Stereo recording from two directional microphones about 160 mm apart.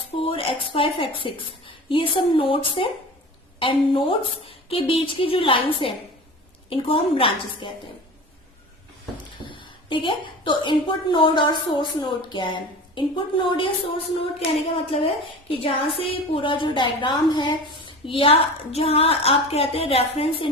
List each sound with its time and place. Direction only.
0.2 s a woman's voice: 35° left (ahead or behind)
9.6 s a woman's voice: 30° left (ahead or behind)
14.8 s a woman's voice: 35° left (ahead or behind)